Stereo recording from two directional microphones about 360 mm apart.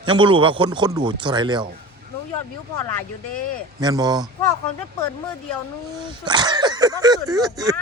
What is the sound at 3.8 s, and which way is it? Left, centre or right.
Speech, centre.